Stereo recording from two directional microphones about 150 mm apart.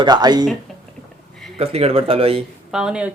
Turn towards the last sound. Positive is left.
turn(degrees=-5)  # may be behind; listen again after turning